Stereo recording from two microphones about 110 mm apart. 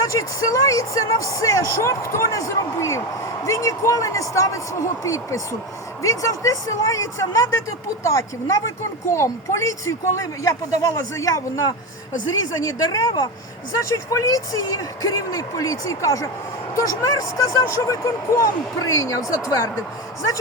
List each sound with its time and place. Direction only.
0.0 s speech: 30° left (ahead or behind)
13.8 s a woman's voice: 30° left (ahead or behind)